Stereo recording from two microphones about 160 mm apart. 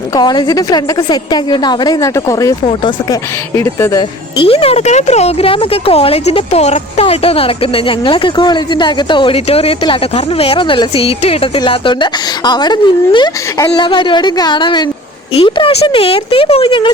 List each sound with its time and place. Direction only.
0.1 s a woman's voice: 25° left (ahead or behind)
3.5 s speech: 15° left (ahead or behind)
4.4 s speech: 35° left (ahead or behind)